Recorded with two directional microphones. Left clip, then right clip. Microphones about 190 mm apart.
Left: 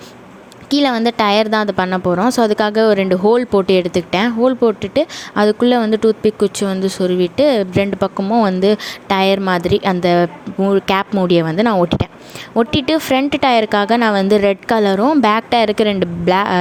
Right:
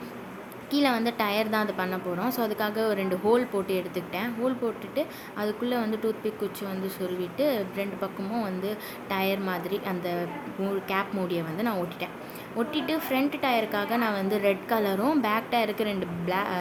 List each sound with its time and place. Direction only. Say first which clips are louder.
0.7 s a woman's voice: left 11 dB; 45° left (ahead or behind)